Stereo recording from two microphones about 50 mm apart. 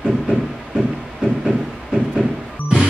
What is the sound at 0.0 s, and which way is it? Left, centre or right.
Train, centre.